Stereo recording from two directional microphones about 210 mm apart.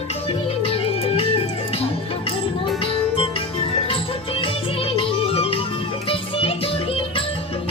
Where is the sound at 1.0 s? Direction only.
25° left (ahead or behind).